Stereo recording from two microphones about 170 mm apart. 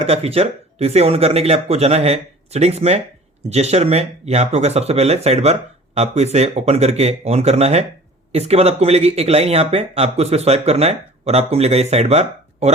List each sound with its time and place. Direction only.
0.0 s speech: 35° right (ahead or behind)